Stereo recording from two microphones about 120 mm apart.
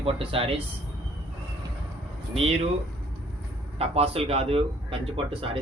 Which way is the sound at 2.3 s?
55° right (ahead or behind).